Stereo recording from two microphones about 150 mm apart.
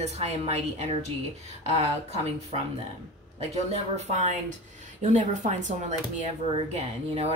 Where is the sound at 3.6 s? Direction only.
50° right (ahead or behind).